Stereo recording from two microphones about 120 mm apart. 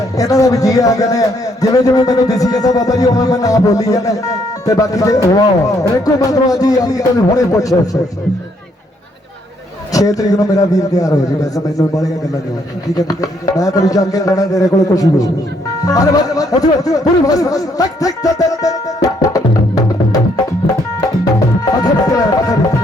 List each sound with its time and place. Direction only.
0.2 s speech: 30° left (ahead or behind)
9.9 s speech: 30° left (ahead or behind)
19.0 s music: 30° left (ahead or behind)
21.6 s music: 30° left (ahead or behind)